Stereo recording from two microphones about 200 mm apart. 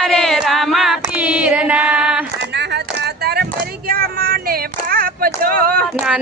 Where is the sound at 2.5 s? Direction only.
60° right (ahead or behind).